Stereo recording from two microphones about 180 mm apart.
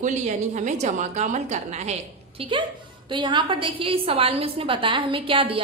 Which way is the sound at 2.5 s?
25° right (ahead or behind).